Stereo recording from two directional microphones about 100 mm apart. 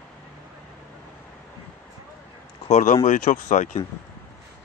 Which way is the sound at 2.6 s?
90° left.